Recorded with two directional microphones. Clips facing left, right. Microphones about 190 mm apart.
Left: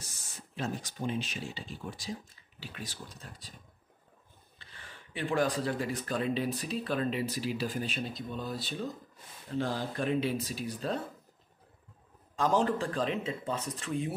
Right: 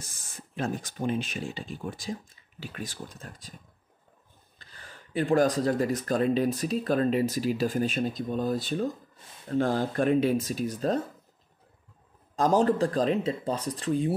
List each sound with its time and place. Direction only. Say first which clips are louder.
0.0 s speech: right 3 dB; 50° right (ahead or behind)
4.6 s speech: right 2 dB; 40° right (ahead or behind)
12.4 s speech: right 5 dB; 40° right (ahead or behind)